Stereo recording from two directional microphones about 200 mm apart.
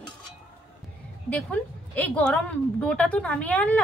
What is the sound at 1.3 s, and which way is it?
A woman's voice, 5° left (ahead or behind).